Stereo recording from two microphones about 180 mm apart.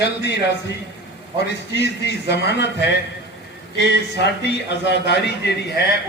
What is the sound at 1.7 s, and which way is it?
Speech, 70° left (ahead or behind).